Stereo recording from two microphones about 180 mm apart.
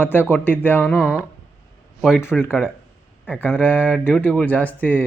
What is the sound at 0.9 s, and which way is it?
Speech, 5° right (ahead or behind).